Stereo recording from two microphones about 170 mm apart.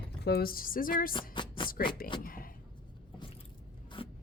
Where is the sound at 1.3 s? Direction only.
30° left (ahead or behind).